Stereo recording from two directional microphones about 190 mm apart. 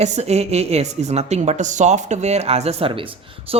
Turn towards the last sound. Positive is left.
turn(degrees=-25)  # may be behind; listen again after turning